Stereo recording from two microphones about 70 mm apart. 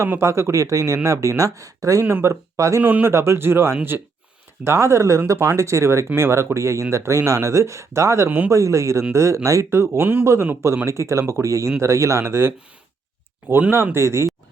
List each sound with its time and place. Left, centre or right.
0.2 s speech: right
2.0 s speech: right
2.8 s a man's voice: right
3.1 s a man's voice: right
13.6 s a man's voice: right